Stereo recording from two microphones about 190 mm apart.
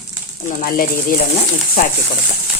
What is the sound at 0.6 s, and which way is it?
Speech, 50° left (ahead or behind).